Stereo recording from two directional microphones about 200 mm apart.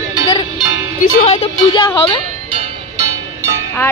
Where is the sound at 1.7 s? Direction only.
25° left (ahead or behind).